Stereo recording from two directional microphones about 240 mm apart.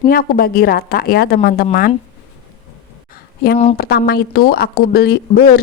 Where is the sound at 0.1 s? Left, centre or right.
Left.